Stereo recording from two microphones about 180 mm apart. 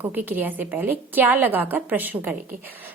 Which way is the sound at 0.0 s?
10° right (ahead or behind).